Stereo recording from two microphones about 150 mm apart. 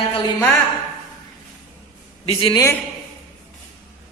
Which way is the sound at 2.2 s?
35° left (ahead or behind).